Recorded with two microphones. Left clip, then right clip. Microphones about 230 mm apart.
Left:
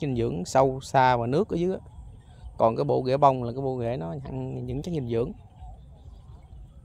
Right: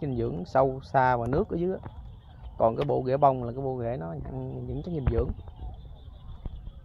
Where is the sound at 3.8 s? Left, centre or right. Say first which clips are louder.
Left 2 dB; left.